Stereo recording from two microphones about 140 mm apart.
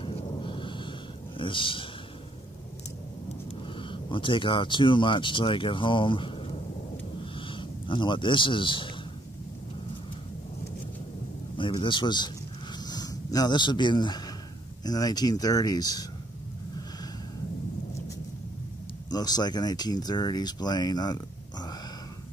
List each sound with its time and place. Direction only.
0.0 s thunder: 40° left (ahead or behind)
1.4 s speech: 35° left (ahead or behind)
3.6 s speech: 35° left (ahead or behind)
11.7 s speech: 35° left (ahead or behind)
12.7 s a sound: 30° left (ahead or behind)
14.8 s speech: 25° left (ahead or behind)
19.0 s speech: 30° left (ahead or behind)